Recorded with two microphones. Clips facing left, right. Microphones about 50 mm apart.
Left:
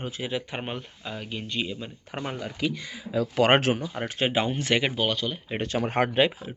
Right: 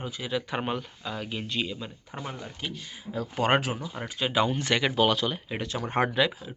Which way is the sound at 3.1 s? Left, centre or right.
Left.